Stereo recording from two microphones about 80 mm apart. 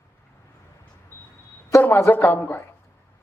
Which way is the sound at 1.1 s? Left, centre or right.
Left.